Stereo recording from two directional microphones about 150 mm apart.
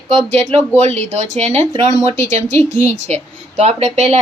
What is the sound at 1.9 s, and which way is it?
Speech, 20° left (ahead or behind).